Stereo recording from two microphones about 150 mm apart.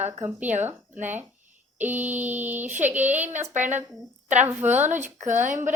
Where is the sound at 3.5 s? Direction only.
55° right (ahead or behind).